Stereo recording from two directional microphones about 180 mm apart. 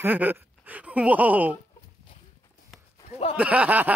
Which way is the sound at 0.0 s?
10° right (ahead or behind).